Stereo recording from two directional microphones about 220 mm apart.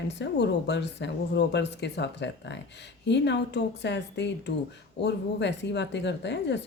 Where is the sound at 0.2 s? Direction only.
50° left (ahead or behind).